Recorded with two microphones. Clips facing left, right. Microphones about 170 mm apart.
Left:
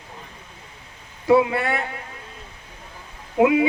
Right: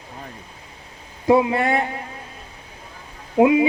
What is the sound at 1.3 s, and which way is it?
Speech, 20° right (ahead or behind).